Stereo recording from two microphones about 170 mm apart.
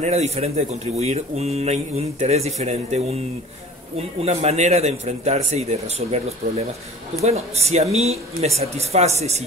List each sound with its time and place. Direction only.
0.0 s speech: 40° right (ahead or behind)
4.2 s speech: 40° right (ahead or behind)